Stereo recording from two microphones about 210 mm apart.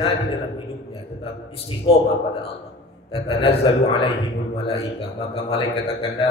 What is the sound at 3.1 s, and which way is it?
A man's voice, 25° left (ahead or behind).